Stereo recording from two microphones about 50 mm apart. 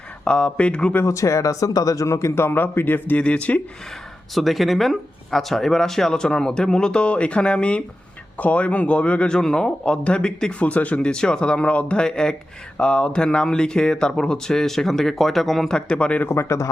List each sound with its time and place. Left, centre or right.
0.3 s speech: centre
1.0 s a man's voice: left
3.2 s speech: left
4.4 s speech: centre; by 11.0 s left
11.0 s speech: centre
15.7 s speech: left
16.3 s speech: left